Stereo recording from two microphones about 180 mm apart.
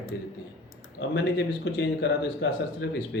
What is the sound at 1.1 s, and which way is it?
A man's voice, 80° left.